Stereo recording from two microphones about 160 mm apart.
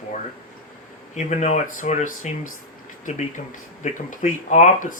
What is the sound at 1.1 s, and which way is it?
Speech, 45° left (ahead or behind).